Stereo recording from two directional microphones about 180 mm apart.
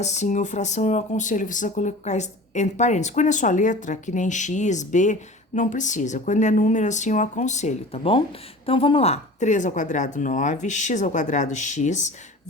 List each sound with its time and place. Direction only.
0.0 s speech: 40° left (ahead or behind)